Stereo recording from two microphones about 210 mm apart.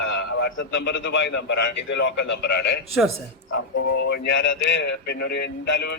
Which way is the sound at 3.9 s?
50° left (ahead or behind).